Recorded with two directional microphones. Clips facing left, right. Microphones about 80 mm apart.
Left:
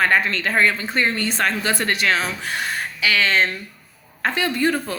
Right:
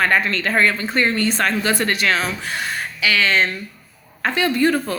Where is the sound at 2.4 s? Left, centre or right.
Left.